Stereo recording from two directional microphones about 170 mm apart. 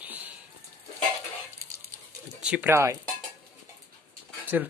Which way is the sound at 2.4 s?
10° right (ahead or behind).